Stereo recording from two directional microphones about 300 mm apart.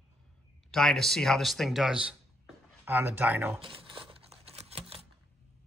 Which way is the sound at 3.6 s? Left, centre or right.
Centre.